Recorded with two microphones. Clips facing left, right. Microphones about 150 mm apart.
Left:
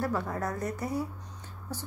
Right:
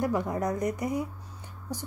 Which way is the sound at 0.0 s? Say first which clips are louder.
Right 3 dB; 15° right (ahead or behind).